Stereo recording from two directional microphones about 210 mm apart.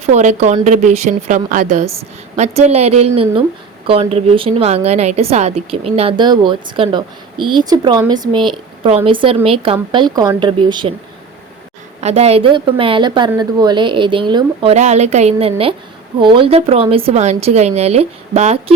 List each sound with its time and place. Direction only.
0.1 s a woman's voice: 35° right (ahead or behind)
11.9 s a woman's voice: 30° right (ahead or behind)